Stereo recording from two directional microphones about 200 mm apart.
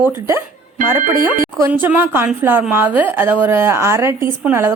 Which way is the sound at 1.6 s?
10° right (ahead or behind).